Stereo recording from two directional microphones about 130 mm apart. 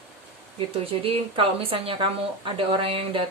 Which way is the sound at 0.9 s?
45° right (ahead or behind).